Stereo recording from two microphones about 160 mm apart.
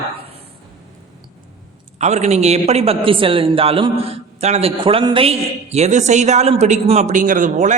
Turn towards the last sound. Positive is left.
turn(degrees=-50)  # may be behind; listen again after turning